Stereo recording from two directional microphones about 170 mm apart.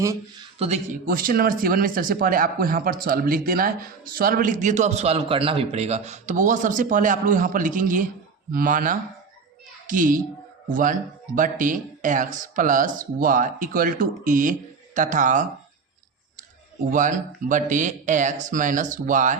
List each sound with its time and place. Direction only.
0.0 s speech: 15° right (ahead or behind)
0.6 s a child's voice: 45° right (ahead or behind)
16.9 s speech: 50° right (ahead or behind)